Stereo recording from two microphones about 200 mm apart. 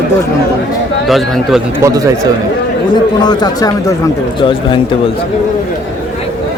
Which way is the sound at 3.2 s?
20° left (ahead or behind).